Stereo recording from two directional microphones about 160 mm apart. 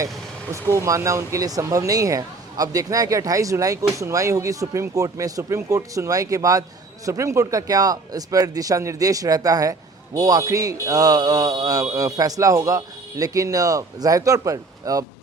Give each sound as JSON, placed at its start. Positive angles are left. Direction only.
{"t": 0.5, "sound": "speech", "side_deg": -20}